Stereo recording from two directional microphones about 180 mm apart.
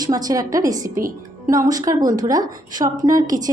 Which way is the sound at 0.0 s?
20° right (ahead or behind).